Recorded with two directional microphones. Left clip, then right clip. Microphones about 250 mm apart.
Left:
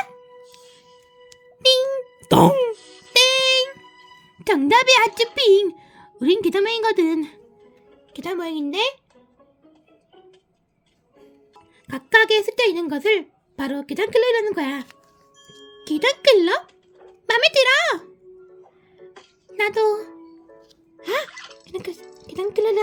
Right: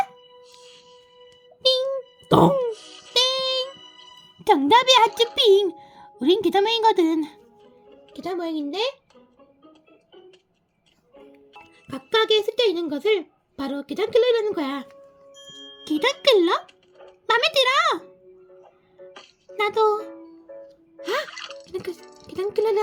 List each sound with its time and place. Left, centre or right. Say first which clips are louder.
0.4 s music: even; right
2.2 s cough: left 2 dB; left
2.8 s music: right 2 dB; right
3.1 s music: left 6 dB; left
3.8 s music: right 1 dB; right
4.4 s a woman's voice: even; centre
8.1 s speech: left 1 dB; left
11.9 s a woman's voice: left 4 dB; centre
19.5 s speech: left 1 dB; centre
21.0 s music: left 2 dB; centre
21.2 s music: right 3 dB; right
21.6 s music: left 2 dB; centre
21.9 s speech: left 2 dB; right
22.3 s a child's voice: left 2 dB; centre